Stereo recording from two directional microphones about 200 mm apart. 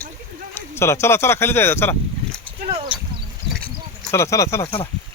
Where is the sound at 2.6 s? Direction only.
30° right (ahead or behind).